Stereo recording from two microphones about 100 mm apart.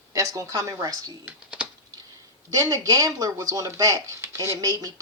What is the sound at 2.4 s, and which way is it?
Speech, 35° right (ahead or behind).